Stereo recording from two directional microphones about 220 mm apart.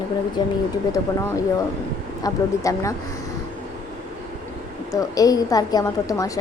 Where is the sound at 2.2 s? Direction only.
15° left (ahead or behind).